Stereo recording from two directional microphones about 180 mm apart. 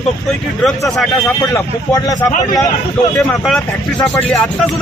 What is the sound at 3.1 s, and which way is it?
Speech, centre (ahead or behind).